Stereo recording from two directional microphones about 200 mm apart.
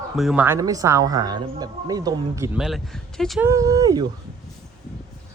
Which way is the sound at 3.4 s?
15° right (ahead or behind).